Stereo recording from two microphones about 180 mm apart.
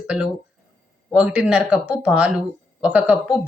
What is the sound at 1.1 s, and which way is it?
Speech, 5° right (ahead or behind).